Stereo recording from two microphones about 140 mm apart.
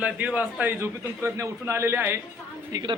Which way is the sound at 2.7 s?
30° right (ahead or behind).